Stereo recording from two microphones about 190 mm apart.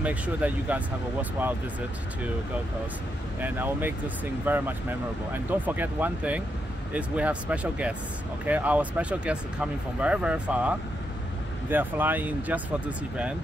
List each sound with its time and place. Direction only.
0.0 s speech: 10° right (ahead or behind)
3.3 s speech: 10° right (ahead or behind)